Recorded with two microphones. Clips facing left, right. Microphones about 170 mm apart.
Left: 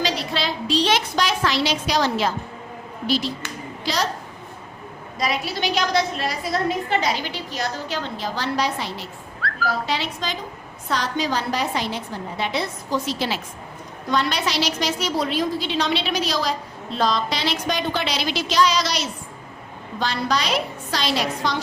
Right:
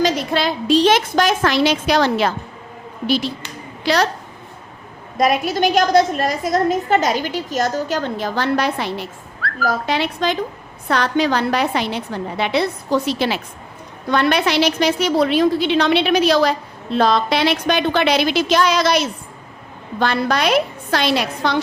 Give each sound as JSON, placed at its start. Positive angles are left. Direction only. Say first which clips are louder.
{"t": 0.0, "sound": "a woman's voice", "louder": "right 6 dB", "side_deg": -45}
{"t": 5.1, "sound": "a woman's voice", "louder": "right 8 dB", "side_deg": -50}